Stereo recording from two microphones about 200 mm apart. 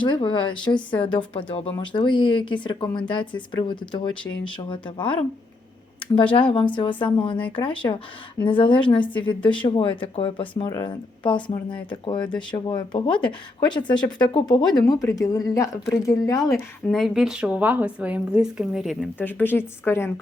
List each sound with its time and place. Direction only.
0.0 s speech: 25° left (ahead or behind)
6.3 s speech: 25° left (ahead or behind)
16.5 s a woman's voice: centre (ahead or behind)
19.2 s speech: 10° left (ahead or behind)